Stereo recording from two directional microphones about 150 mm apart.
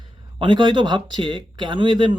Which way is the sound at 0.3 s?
30° right (ahead or behind).